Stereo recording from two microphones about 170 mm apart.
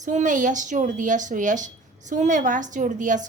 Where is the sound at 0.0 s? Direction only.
45° right (ahead or behind).